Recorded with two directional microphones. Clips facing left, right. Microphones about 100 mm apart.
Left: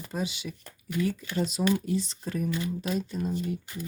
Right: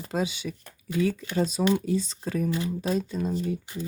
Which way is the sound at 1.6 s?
90° right.